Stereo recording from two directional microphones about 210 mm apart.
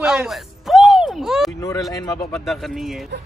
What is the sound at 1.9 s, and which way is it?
Speech, 15° left (ahead or behind).